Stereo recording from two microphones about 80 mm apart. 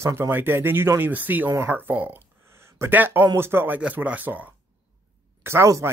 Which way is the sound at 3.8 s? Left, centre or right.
Centre.